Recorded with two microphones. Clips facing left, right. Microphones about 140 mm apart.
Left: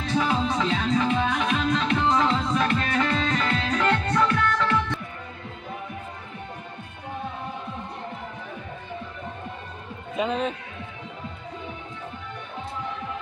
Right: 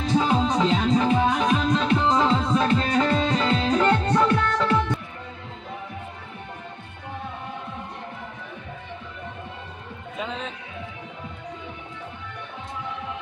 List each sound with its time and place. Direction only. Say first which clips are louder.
0.1 s music: right 3 dB; 25° right (ahead or behind)
10.1 s music: left 7 dB; 15° left (ahead or behind)